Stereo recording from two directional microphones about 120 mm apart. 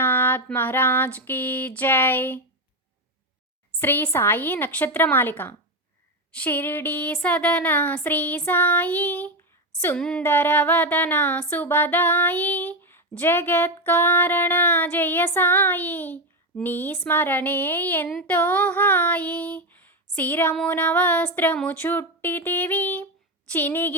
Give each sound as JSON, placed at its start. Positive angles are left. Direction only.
{"t": 0.0, "sound": "speech", "side_deg": 15}
{"t": 3.8, "sound": "speech", "side_deg": 15}
{"t": 18.3, "sound": "female singing", "side_deg": 15}
{"t": 20.7, "sound": "speech", "side_deg": 15}